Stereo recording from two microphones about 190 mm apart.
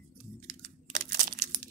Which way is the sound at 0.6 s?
45° right (ahead or behind).